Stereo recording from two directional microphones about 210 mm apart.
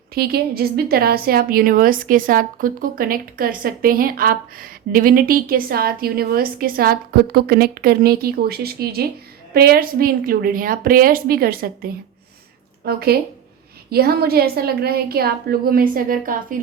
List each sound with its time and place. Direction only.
0.1 s a woman's voice: 45° right (ahead or behind)